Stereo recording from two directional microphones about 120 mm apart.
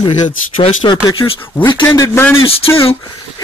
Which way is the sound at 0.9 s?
40° left (ahead or behind).